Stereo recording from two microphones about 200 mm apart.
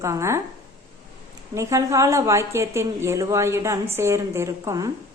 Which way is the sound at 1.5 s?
15° right (ahead or behind).